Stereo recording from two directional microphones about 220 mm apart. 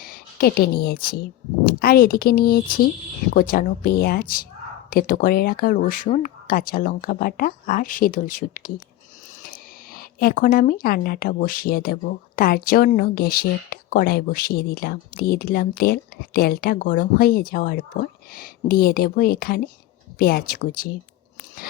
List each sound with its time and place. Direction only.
0.0 s speech: 45° left (ahead or behind)